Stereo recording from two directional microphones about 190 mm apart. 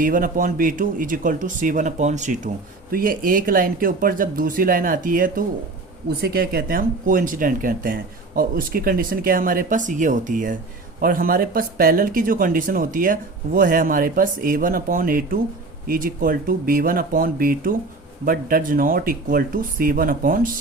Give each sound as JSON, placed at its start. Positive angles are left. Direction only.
{"t": 0.0, "sound": "speech", "side_deg": -45}